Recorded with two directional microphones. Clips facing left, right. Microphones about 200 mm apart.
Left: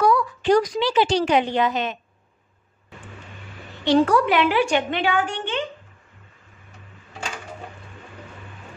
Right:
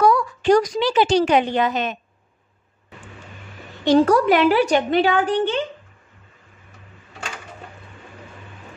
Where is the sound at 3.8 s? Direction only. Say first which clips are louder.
Right 3 dB; 45° right (ahead or behind).